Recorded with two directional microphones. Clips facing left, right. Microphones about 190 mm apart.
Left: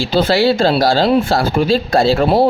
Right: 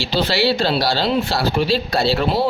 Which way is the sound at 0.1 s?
50° left (ahead or behind).